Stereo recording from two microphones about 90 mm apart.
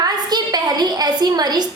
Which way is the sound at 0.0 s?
50° right (ahead or behind).